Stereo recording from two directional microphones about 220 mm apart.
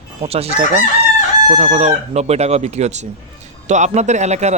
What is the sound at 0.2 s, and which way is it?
A man's voice, 25° right (ahead or behind).